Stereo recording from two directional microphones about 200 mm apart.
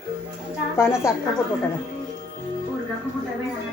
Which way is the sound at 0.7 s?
10° left (ahead or behind).